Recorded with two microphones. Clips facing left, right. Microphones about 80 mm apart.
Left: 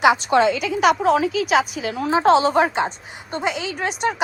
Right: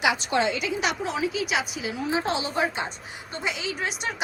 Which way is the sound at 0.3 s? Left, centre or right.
Left.